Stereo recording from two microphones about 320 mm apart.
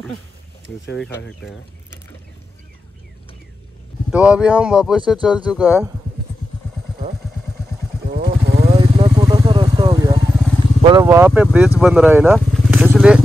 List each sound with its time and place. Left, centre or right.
0.9 s speech: centre
4.1 s speech: centre
8.1 s vehicle: right
10.8 s speech: centre
11.8 s vehicle: centre